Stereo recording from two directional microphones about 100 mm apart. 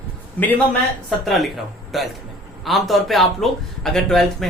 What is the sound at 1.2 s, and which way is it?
A man's voice, centre (ahead or behind).